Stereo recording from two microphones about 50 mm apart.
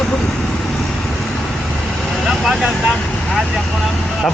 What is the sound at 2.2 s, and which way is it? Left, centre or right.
Vehicle, centre.